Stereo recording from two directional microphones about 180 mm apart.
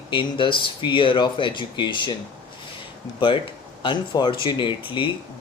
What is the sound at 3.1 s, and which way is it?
Speech, 30° left (ahead or behind).